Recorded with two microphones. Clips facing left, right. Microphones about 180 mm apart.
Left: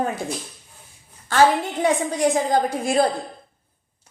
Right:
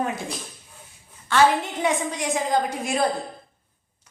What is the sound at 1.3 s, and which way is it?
Speech, 40° left (ahead or behind).